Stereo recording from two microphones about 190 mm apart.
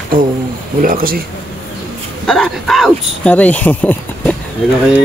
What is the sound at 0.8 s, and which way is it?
Speech, 50° right (ahead or behind).